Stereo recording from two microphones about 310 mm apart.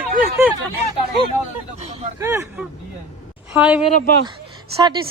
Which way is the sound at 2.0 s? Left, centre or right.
Centre.